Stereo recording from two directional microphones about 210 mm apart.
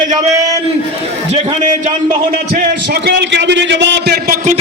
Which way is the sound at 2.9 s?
50° right (ahead or behind).